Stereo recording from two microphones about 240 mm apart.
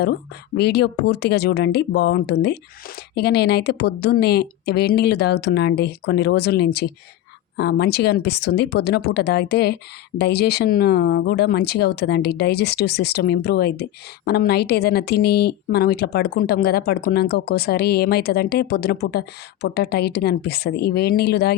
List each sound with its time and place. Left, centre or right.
0.0 s speech: left